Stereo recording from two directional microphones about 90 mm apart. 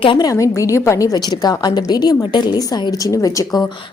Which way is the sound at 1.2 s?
55° left (ahead or behind).